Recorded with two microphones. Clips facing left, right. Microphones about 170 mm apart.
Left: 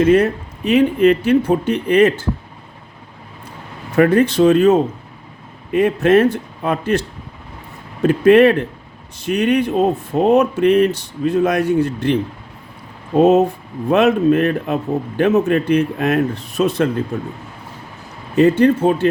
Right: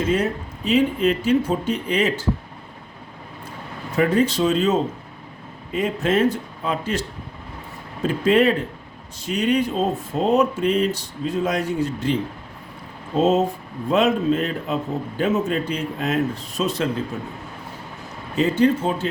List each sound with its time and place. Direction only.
0.0 s speech: 65° left (ahead or behind)
3.9 s speech: 60° left (ahead or behind)
8.0 s speech: 60° left (ahead or behind)
13.1 s speech: 60° left (ahead or behind)
18.3 s speech: 60° left (ahead or behind)